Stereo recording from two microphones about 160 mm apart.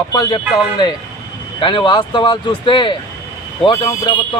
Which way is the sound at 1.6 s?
30° left (ahead or behind).